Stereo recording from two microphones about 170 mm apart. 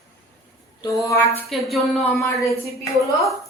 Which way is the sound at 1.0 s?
20° left (ahead or behind).